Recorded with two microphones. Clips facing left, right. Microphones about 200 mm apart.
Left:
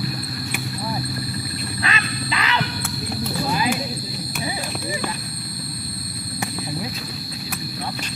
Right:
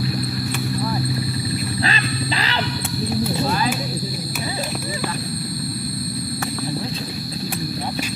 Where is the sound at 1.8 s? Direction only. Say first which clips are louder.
Right 3 dB; 30° right (ahead or behind).